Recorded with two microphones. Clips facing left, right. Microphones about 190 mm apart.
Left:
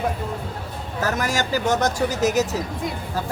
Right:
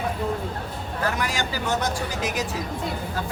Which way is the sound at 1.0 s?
40° left (ahead or behind).